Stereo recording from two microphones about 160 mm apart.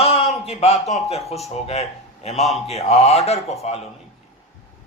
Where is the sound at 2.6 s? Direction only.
40° left (ahead or behind).